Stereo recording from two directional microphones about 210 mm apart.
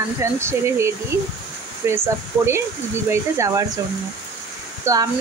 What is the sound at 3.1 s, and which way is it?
Speech, 15° right (ahead or behind).